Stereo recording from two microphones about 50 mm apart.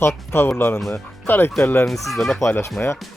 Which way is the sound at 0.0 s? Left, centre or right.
Left.